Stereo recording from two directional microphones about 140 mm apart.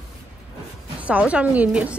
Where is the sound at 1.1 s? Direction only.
10° right (ahead or behind).